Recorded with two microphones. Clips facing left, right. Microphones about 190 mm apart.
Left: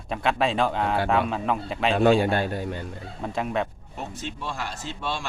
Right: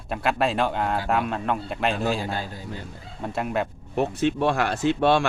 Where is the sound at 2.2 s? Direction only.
65° left (ahead or behind).